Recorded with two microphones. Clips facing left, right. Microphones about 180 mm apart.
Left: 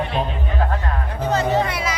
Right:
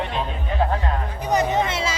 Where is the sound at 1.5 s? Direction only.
20° right (ahead or behind).